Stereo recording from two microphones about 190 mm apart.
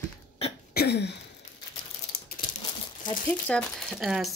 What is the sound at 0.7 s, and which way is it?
Throat clearing, 60° left (ahead or behind).